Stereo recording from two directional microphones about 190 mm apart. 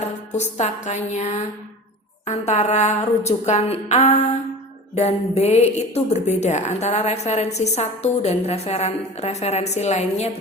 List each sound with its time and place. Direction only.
0.3 s a woman's voice: 35° left (ahead or behind)